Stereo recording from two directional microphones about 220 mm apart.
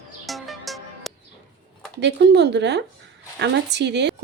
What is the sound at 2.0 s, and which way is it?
Speech, 50° right (ahead or behind).